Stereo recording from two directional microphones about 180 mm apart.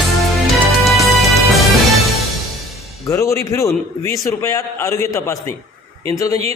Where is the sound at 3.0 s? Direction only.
15° left (ahead or behind).